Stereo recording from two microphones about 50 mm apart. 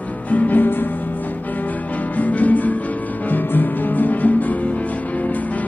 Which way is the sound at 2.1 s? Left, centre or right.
Left.